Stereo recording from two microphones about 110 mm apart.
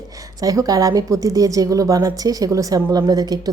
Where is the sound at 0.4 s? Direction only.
35° right (ahead or behind).